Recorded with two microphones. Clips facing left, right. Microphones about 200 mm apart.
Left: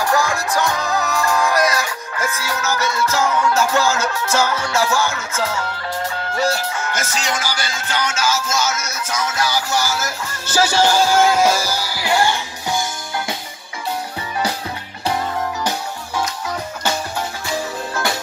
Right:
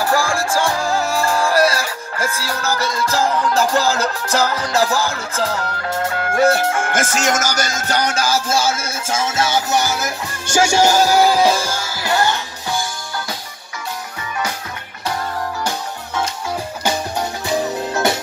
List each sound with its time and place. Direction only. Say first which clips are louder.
0.0 s music: right 1 dB; 30° right (ahead or behind)
6.1 s music: right 7 dB; 55° right (ahead or behind); by 11.0 s 10° right (ahead or behind)
11.0 s music: right 1 dB; 40° right (ahead or behind)
12.1 s music: even; 15° left (ahead or behind)